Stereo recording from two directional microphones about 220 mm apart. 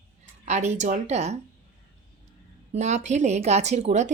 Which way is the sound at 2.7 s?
30° right (ahead or behind).